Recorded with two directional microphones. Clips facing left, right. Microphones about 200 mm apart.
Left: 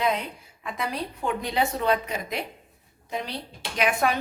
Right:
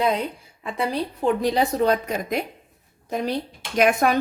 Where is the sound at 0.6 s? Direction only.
30° right (ahead or behind).